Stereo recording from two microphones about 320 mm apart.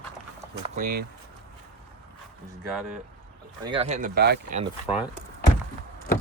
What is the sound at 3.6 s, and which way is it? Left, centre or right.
Speech, centre.